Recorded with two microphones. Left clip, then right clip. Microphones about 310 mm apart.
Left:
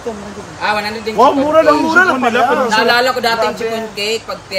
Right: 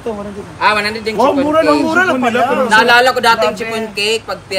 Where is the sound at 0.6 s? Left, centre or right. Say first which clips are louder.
Right 4 dB; centre.